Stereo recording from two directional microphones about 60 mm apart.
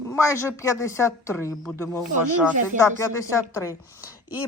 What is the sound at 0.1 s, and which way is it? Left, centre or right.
A woman's voice, left.